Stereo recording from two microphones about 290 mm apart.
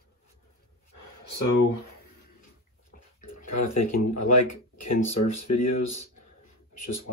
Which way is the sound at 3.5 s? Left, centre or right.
Left.